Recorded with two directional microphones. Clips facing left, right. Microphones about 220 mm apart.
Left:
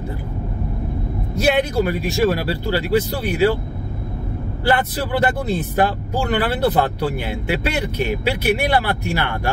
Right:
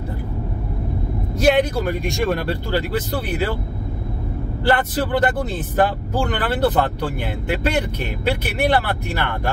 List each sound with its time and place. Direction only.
1.3 s speech: 10° left (ahead or behind)
4.6 s speech: 10° left (ahead or behind)